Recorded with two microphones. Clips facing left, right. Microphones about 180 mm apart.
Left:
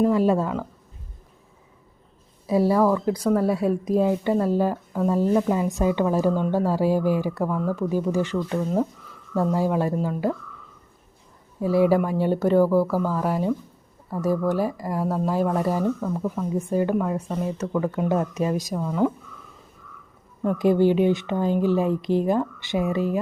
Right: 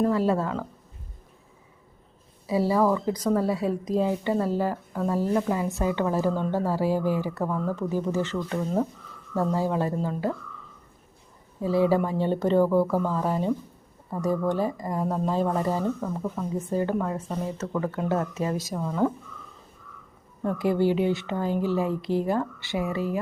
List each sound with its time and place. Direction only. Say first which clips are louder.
0.0 s speech: left 3 dB; 15° left (ahead or behind)
2.7 s speech: left 1 dB; 5° right (ahead or behind)
3.1 s speech: left 3 dB; 10° left (ahead or behind)
11.6 s speech: left 3 dB; 15° left (ahead or behind)
18.7 s speech: left 2 dB; 5° left (ahead or behind)
20.4 s a woman's voice: left 4 dB; 15° left (ahead or behind)